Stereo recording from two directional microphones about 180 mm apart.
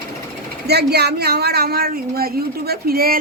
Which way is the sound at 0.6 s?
65° right (ahead or behind).